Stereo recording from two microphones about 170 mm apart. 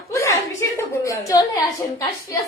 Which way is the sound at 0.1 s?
15° left (ahead or behind).